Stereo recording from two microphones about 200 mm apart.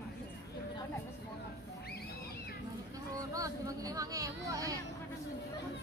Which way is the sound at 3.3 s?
15° right (ahead or behind).